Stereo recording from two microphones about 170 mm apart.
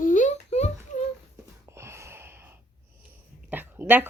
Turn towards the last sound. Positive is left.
turn(degrees=-10)  # may be behind; listen again after turning